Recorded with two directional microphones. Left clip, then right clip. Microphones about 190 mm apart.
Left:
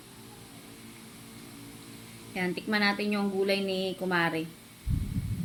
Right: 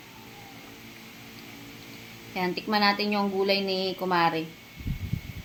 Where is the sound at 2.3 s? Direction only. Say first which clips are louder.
Right 3 dB; 10° left (ahead or behind).